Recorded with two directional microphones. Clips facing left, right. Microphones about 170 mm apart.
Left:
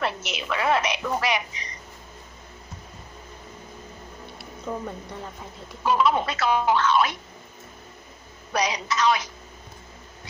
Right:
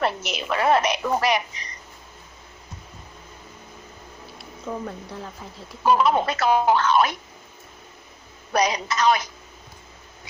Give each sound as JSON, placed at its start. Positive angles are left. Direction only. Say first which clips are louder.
{"t": 0.0, "sound": "a woman's voice", "louder": "right 3 dB", "side_deg": -40}
{"t": 4.3, "sound": "speech", "louder": "even", "side_deg": 0}
{"t": 5.9, "sound": "speech", "louder": "right 3 dB", "side_deg": -45}
{"t": 8.5, "sound": "speech", "louder": "right 3 dB", "side_deg": -45}